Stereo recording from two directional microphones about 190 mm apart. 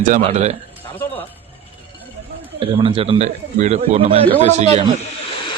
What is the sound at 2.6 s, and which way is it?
A man's voice, 30° right (ahead or behind).